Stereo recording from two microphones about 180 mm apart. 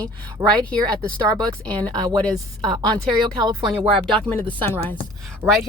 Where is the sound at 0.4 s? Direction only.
15° right (ahead or behind).